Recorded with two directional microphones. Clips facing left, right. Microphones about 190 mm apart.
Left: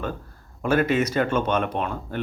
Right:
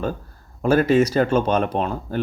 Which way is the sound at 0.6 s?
35° right (ahead or behind).